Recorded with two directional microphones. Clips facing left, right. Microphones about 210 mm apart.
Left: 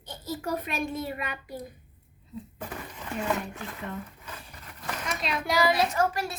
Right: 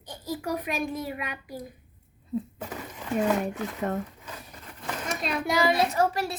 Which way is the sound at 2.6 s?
10° right (ahead or behind).